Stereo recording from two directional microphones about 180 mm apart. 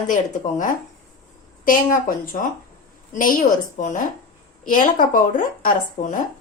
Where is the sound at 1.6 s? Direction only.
50° left (ahead or behind).